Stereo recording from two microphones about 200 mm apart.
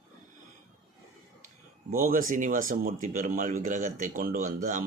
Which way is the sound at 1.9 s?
45° right (ahead or behind).